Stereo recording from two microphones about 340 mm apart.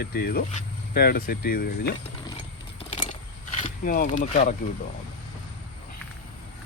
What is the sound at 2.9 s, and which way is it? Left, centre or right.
Vehicle, centre.